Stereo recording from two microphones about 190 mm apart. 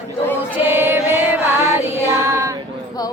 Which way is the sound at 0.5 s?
10° right (ahead or behind).